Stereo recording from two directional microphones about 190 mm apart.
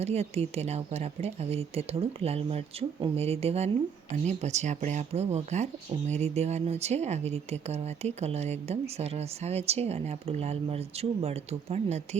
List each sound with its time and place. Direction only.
0.0 s speech: 35° right (ahead or behind)